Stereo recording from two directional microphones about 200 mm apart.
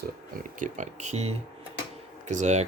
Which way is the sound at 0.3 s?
40° right (ahead or behind).